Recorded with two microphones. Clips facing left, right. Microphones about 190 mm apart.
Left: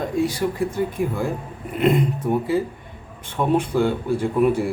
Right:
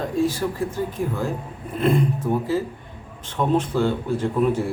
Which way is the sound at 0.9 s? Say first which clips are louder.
Left 2 dB; 10° left (ahead or behind).